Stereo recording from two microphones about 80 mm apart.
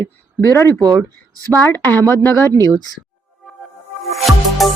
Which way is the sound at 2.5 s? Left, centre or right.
Right.